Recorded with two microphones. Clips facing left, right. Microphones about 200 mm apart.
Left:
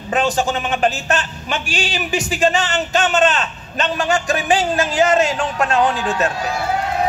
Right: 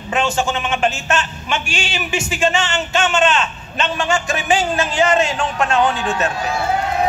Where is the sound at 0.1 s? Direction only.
35° left (ahead or behind).